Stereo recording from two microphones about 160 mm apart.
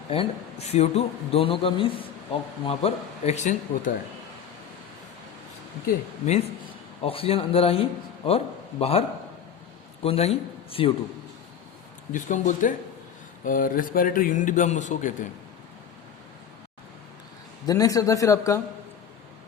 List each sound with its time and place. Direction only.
0.1 s a man's voice: 40° left (ahead or behind)
6.2 s a man's voice: 40° left (ahead or behind)
12.1 s speech: 55° left (ahead or behind)
17.7 s speech: 20° left (ahead or behind)